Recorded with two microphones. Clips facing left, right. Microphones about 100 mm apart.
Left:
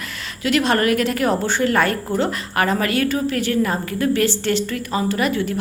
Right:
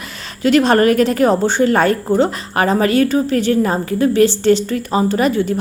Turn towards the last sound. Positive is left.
turn(degrees=-25)  # may be behind; listen again after turning